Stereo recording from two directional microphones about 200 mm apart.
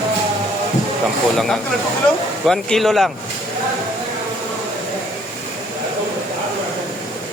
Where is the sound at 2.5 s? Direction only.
Centre (ahead or behind).